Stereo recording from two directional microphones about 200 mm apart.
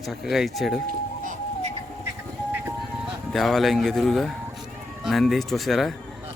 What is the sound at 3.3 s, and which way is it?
Speech, centre (ahead or behind).